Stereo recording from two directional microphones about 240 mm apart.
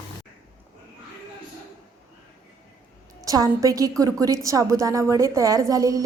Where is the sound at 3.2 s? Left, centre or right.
Centre.